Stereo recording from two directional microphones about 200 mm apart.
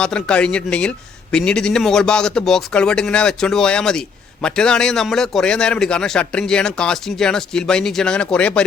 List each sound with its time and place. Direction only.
0.0 s speech: 5° left (ahead or behind)